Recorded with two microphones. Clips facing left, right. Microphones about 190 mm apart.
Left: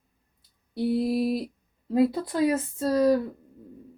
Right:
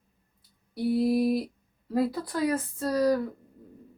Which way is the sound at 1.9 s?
20° left (ahead or behind).